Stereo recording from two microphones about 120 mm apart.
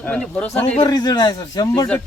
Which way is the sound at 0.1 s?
10° left (ahead or behind).